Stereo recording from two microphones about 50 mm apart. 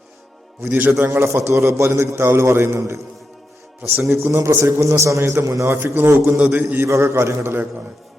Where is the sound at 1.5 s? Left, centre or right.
Right.